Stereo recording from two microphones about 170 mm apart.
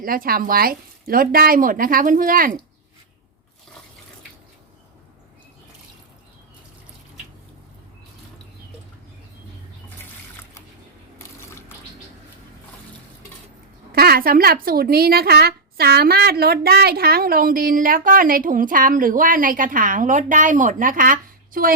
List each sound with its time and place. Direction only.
0.0 s a woman's voice: 60° right (ahead or behind)
11.2 s a sound: 15° left (ahead or behind)
13.9 s a woman's voice: 65° right (ahead or behind)